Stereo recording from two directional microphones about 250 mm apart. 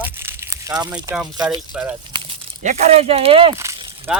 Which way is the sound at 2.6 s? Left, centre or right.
Right.